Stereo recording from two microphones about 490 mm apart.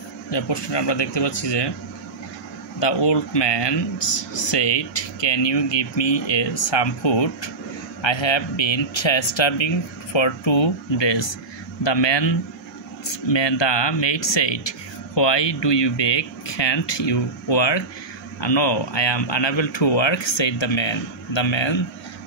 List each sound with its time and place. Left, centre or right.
0.3 s speech: left
2.8 s speech: left